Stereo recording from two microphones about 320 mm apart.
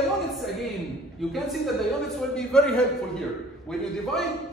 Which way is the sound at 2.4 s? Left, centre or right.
Centre.